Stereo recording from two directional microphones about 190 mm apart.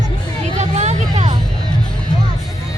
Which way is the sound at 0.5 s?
35° right (ahead or behind).